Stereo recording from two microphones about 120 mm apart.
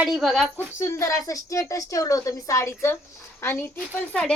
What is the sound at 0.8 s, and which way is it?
A woman's voice, 25° left (ahead or behind).